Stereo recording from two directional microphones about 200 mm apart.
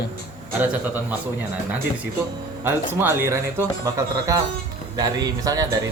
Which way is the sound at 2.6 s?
10° right (ahead or behind).